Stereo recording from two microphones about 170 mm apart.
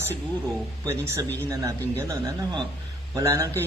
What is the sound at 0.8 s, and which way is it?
A man's voice, 15° right (ahead or behind).